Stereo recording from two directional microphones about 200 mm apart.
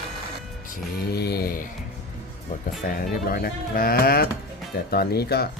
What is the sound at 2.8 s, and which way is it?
Speech, 45° left (ahead or behind).